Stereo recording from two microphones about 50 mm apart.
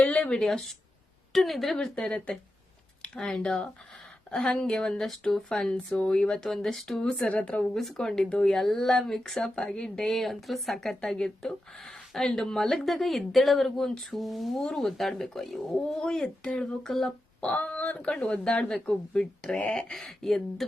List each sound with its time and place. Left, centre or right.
0.0 s a sound: left
0.3 s speech: centre
10.0 s speech: centre
16.9 s speech: centre
17.5 s speech: left; by 20.7 s centre